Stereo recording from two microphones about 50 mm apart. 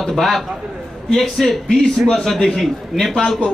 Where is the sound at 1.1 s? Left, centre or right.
Centre.